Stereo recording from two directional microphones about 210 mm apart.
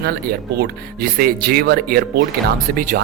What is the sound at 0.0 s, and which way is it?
Speech, 50° right (ahead or behind).